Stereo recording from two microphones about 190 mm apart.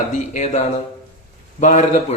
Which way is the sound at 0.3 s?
40° left (ahead or behind).